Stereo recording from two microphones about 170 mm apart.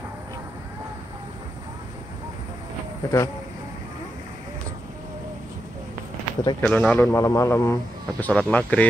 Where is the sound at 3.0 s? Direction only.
15° left (ahead or behind).